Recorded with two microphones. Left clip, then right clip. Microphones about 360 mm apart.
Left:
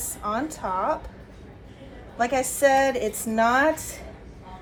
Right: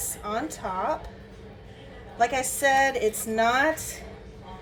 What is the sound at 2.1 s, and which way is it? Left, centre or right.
A woman's voice, centre.